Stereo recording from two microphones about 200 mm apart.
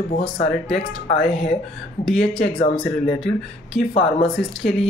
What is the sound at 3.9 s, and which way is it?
Speech, 25° left (ahead or behind).